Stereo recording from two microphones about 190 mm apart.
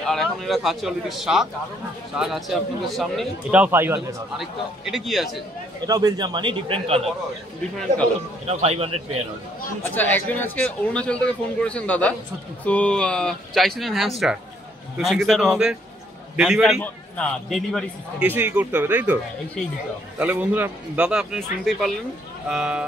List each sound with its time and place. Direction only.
0.0 s a man's voice: centre (ahead or behind)
5.9 s speech: 20° right (ahead or behind)
8.5 s speech: 35° right (ahead or behind)
9.9 s a man's voice: 10° left (ahead or behind)
18.2 s speech: 10° right (ahead or behind)
20.2 s a man's voice: 10° right (ahead or behind)